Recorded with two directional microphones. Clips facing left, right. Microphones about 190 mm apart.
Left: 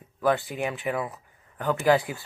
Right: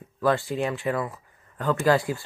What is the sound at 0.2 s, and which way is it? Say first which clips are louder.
Speech: right 1 dB; 15° left (ahead or behind).